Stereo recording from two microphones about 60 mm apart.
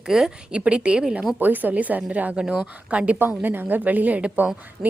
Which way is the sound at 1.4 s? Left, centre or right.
Right.